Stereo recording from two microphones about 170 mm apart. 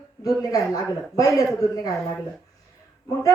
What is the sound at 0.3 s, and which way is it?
A man's voice, 20° left (ahead or behind).